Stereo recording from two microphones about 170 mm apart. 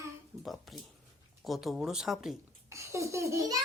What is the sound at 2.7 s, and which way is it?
Baby laughter, 15° right (ahead or behind).